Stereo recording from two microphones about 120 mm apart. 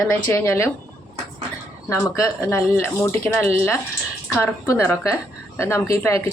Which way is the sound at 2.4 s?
20° left (ahead or behind).